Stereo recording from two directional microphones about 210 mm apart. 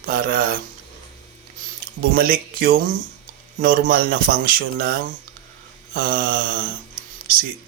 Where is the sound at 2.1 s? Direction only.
45° right (ahead or behind).